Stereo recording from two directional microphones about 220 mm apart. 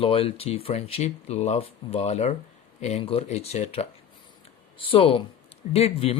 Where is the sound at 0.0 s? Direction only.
25° left (ahead or behind).